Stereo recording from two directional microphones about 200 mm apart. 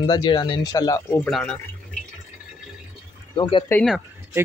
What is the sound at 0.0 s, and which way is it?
Speech, 20° left (ahead or behind).